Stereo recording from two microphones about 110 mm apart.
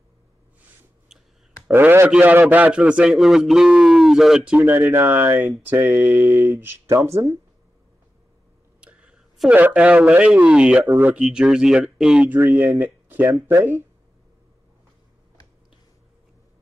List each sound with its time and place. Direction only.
1.7 s a man's voice: 20° right (ahead or behind); by 4.6 s 5° right (ahead or behind)
4.6 s speech: 20° right (ahead or behind)
8.8 s a sound: 10° right (ahead or behind)
9.6 s a man's voice: 10° right (ahead or behind)
10.8 s speech: 25° right (ahead or behind)
11.1 s speech: 5° right (ahead or behind)
12.4 s speech: 20° right (ahead or behind)